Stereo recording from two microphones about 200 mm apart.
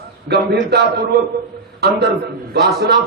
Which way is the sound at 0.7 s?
55° right (ahead or behind).